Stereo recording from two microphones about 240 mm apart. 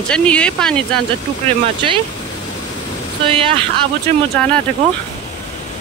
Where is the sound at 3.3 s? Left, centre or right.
Right.